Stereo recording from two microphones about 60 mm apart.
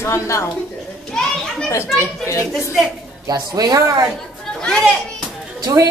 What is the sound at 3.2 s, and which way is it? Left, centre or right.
Speech, right.